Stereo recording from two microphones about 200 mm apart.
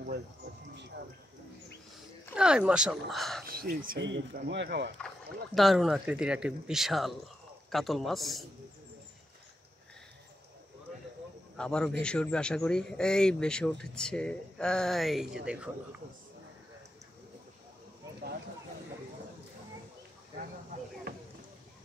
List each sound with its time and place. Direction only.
2.3 s speech: 5° right (ahead or behind)
3.4 s speech: 45° right (ahead or behind)
4.0 s speech: 60° right (ahead or behind)
5.0 s speech: centre (ahead or behind)
11.5 s a man's voice: 5° left (ahead or behind)